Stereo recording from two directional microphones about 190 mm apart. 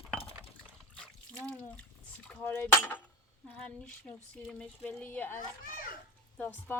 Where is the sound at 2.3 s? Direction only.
10° left (ahead or behind).